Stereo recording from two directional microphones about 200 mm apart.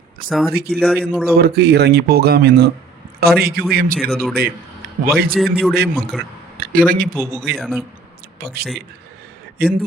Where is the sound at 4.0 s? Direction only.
Centre (ahead or behind).